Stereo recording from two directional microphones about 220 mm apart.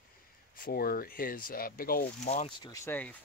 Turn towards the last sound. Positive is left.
turn(degrees=10)  # may be behind; listen again after turning